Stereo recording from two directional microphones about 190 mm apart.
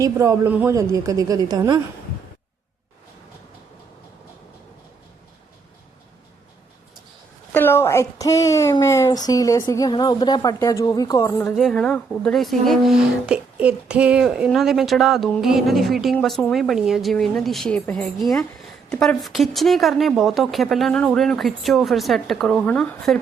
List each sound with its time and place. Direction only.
0.0 s a woman's voice: 15° right (ahead or behind)
7.5 s a woman's voice: 10° left (ahead or behind)
11.5 s speech: centre (ahead or behind)